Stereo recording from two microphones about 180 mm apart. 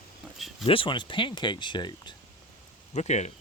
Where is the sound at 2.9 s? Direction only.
40° left (ahead or behind).